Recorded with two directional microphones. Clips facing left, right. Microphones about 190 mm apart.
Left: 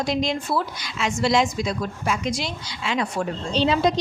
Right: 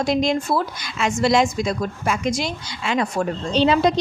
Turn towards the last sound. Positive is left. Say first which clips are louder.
# right 3 dB
turn(degrees=-60)  # may be behind; listen again after turning